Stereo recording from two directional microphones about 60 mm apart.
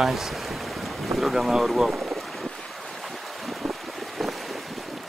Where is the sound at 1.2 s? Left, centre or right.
Centre.